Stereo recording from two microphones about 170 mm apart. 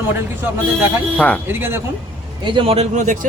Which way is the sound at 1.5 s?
10° right (ahead or behind).